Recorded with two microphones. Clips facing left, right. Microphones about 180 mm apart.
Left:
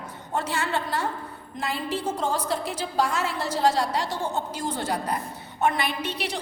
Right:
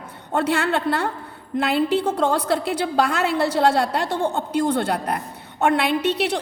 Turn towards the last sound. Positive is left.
turn(degrees=-70)  # may be behind; listen again after turning